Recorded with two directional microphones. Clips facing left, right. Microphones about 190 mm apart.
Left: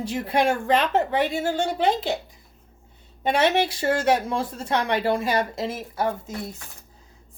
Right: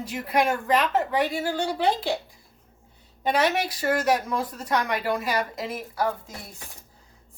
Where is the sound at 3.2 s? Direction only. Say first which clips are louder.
Left 3 dB; 25° left (ahead or behind).